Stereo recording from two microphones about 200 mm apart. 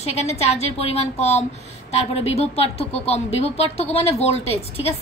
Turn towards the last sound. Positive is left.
turn(degrees=30)  # may be behind; listen again after turning